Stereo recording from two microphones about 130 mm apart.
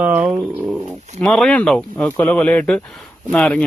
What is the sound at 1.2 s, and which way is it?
Speech, 5° left (ahead or behind).